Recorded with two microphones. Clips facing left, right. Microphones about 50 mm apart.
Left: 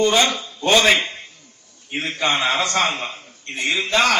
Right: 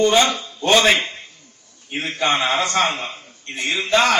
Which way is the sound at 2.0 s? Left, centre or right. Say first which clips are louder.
Right 1 dB; right.